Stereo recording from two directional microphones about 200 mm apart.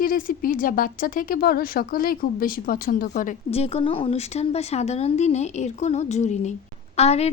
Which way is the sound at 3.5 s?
30° left (ahead or behind).